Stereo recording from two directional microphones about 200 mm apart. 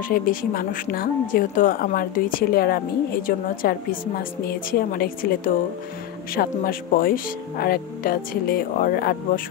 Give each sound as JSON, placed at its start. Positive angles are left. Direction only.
{"t": 0.1, "sound": "speech", "side_deg": 45}